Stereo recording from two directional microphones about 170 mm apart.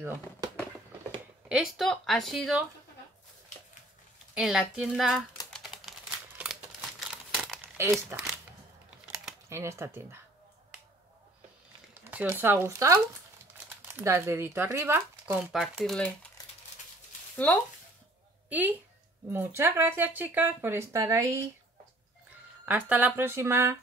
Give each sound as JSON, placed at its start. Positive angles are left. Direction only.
{"t": 0.0, "sound": "speech", "side_deg": -15}
{"t": 1.5, "sound": "speech", "side_deg": 0}
{"t": 4.4, "sound": "speech", "side_deg": -5}
{"t": 5.5, "sound": "typing", "side_deg": 0}
{"t": 7.2, "sound": "crumpling", "side_deg": 0}
{"t": 7.7, "sound": "speech", "side_deg": -15}
{"t": 9.5, "sound": "speech", "side_deg": -15}
{"t": 12.1, "sound": "speech", "side_deg": -10}
{"t": 15.8, "sound": "speech", "side_deg": 5}
{"t": 18.5, "sound": "a woman's voice", "side_deg": -10}
{"t": 22.7, "sound": "speech", "side_deg": -10}